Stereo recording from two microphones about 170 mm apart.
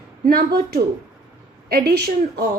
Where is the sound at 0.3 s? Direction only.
65° right (ahead or behind).